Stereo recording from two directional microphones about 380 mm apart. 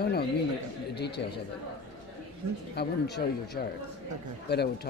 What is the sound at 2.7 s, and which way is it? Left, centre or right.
Speech, left.